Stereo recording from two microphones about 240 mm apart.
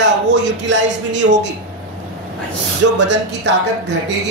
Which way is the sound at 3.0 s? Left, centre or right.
Right.